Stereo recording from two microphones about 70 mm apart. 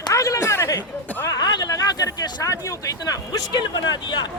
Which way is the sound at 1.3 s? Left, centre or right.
Left.